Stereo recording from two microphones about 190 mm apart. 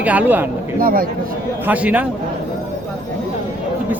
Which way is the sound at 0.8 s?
50° right (ahead or behind).